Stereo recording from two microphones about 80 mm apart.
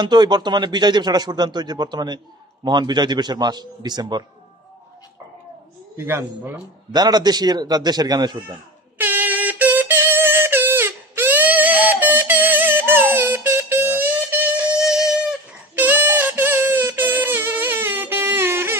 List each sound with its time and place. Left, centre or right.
0.0 s a man's voice: right
5.9 s a man's voice: right
6.9 s a man's voice: right
8.9 s music: right
14.7 s music: centre
15.7 s a sound: right